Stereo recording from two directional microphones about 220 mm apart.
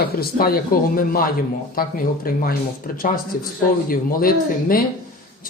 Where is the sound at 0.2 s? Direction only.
45° left (ahead or behind).